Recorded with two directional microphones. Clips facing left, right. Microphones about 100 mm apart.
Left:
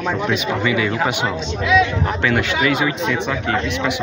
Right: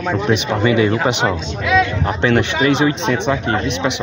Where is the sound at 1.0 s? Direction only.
20° right (ahead or behind).